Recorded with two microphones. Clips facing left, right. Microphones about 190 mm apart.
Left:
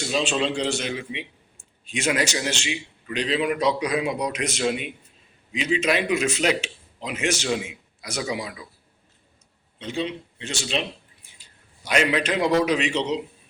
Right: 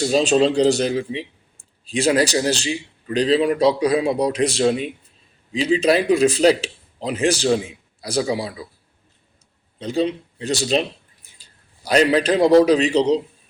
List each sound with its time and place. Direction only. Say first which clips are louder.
0.0 s speech: right 8 dB; 40° right (ahead or behind)
9.7 s speech: right 7 dB; 40° right (ahead or behind)
11.9 s speech: right 6 dB; 35° right (ahead or behind)